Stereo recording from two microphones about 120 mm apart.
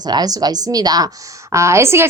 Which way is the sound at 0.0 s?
35° right (ahead or behind).